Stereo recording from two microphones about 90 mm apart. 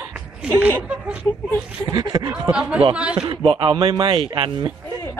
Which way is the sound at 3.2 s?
75° right (ahead or behind).